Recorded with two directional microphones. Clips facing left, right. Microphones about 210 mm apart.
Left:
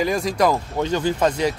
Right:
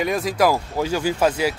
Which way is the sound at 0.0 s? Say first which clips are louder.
Even; centre (ahead or behind).